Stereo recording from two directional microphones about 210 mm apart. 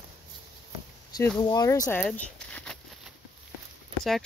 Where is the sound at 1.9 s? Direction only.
10° left (ahead or behind).